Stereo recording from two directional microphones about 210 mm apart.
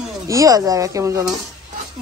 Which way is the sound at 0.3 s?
15° right (ahead or behind).